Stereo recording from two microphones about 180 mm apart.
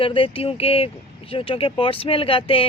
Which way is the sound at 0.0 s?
30° left (ahead or behind).